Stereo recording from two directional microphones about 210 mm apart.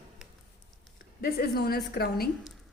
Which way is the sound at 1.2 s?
45° left (ahead or behind).